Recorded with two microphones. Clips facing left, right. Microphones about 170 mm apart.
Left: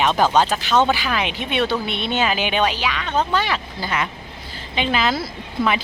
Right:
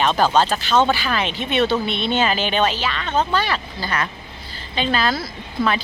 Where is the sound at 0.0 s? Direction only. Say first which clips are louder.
Even; 15° left (ahead or behind).